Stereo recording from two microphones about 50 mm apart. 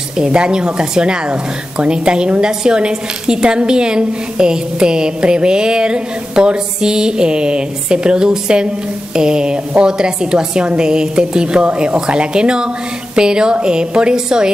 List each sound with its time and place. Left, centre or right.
0.2 s speech: centre